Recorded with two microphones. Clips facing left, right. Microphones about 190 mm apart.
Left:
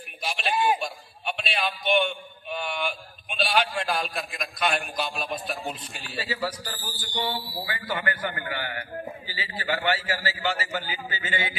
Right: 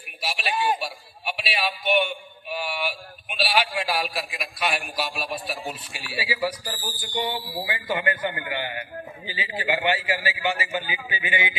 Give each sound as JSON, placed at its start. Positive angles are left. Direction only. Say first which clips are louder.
{"t": 0.2, "sound": "a man's voice", "louder": "even", "side_deg": -5}
{"t": 0.5, "sound": "a man's voice", "louder": "left 1 dB", "side_deg": 10}
{"t": 0.8, "sound": "a man's voice", "louder": "even", "side_deg": -5}